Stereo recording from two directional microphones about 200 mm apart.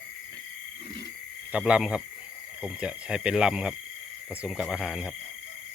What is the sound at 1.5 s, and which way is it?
Speech, 5° right (ahead or behind).